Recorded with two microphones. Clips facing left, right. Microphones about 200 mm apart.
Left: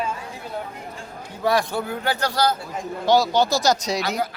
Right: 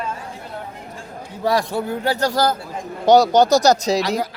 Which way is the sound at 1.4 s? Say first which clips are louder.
Right 2 dB; 35° right (ahead or behind).